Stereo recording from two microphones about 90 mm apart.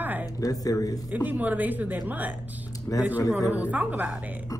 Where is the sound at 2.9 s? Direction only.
35° left (ahead or behind).